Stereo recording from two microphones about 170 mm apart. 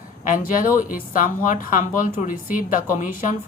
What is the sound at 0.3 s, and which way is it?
A woman's voice, 55° left (ahead or behind).